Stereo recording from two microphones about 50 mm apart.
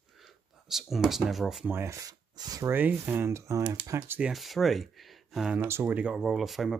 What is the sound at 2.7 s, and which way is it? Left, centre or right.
Speech, right.